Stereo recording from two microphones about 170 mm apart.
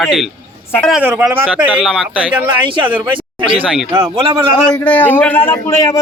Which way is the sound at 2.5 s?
30° right (ahead or behind).